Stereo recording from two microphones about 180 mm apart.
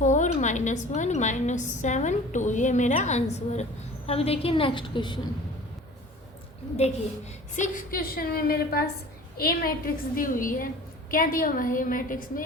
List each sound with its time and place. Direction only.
0.0 s a woman's voice: 45° left (ahead or behind); by 5.2 s 25° left (ahead or behind)
7.5 s a woman's voice: 45° left (ahead or behind)